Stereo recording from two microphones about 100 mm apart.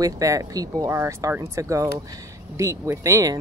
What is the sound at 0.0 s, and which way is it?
Speech, 35° right (ahead or behind).